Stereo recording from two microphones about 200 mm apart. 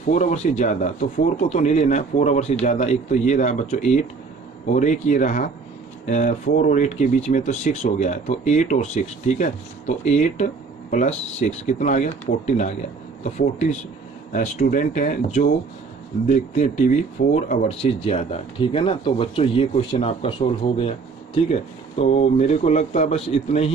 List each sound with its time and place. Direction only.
0.1 s speech: 35° left (ahead or behind)